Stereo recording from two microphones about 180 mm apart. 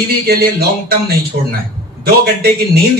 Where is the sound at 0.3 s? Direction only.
60° right (ahead or behind).